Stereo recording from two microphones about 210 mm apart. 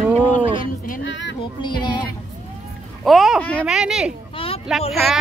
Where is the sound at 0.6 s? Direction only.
40° left (ahead or behind).